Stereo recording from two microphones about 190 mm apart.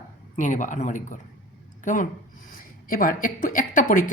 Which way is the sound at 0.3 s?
40° left (ahead or behind).